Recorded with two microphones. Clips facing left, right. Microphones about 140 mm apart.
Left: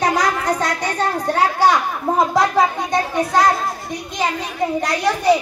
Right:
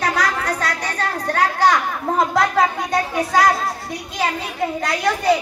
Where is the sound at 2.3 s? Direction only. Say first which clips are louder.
Left 1 dB; 5° right (ahead or behind).